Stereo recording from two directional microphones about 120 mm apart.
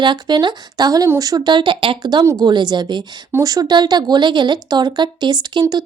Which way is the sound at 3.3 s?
25° right (ahead or behind).